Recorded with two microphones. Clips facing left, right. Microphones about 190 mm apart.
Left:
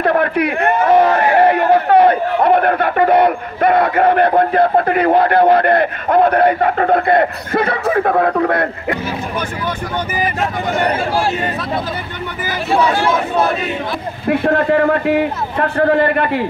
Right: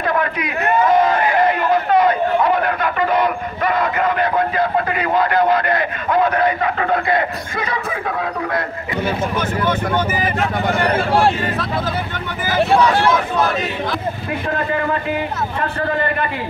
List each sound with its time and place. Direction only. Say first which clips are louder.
0.0 s a sound: left 6 dB; 60° left (ahead or behind)
1.2 s a man's voice: left 4 dB; 65° left (ahead or behind)
14.4 s a man's voice: left 7 dB; 65° left (ahead or behind)